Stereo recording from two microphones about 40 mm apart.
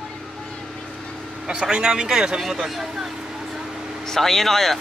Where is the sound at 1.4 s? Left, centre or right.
Centre.